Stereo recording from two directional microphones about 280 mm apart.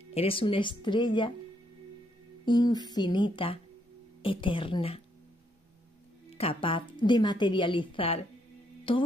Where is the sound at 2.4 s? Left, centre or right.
Centre.